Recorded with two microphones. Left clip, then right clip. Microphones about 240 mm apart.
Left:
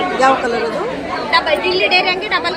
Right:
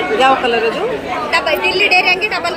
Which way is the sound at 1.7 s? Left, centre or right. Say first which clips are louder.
Right 4 dB; left.